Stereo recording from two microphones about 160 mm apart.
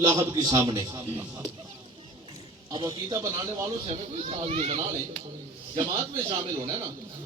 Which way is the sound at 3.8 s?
40° right (ahead or behind).